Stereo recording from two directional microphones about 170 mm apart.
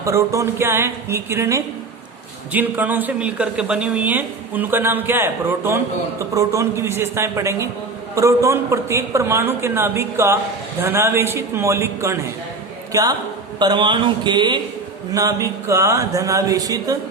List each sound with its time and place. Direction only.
0.0 s a man's voice: 20° right (ahead or behind)